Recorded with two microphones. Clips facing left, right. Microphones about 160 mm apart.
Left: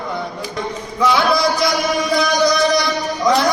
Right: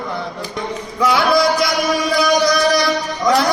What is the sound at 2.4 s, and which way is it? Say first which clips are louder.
Music: even; 20° left (ahead or behind).